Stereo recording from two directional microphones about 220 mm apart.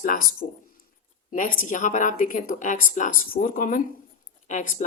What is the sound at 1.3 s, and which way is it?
A woman's voice, 35° left (ahead or behind).